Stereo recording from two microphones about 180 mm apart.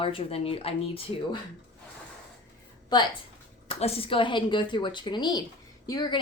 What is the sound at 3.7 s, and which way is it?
A woman's voice, 35° left (ahead or behind).